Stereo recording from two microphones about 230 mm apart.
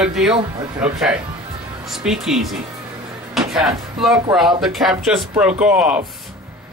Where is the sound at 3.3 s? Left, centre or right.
Centre.